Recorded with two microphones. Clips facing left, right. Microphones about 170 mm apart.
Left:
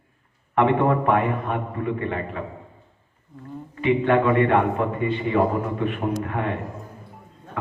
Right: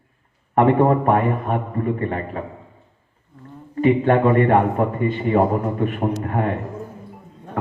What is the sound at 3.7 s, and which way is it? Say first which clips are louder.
A man's voice: right 3 dB; 40° right (ahead or behind).